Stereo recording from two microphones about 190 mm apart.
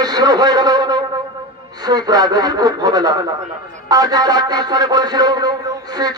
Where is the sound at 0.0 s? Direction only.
20° right (ahead or behind).